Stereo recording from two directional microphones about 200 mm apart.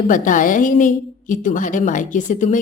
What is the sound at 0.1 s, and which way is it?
A woman's voice, 40° left (ahead or behind).